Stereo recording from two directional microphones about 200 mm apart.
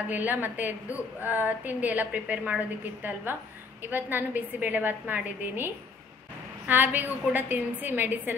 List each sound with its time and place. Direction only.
0.1 s a woman's voice: 10° right (ahead or behind)
6.7 s a woman's voice: 10° right (ahead or behind)